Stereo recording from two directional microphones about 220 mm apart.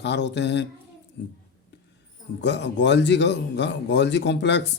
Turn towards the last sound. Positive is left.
turn(degrees=55)  # may be behind; listen again after turning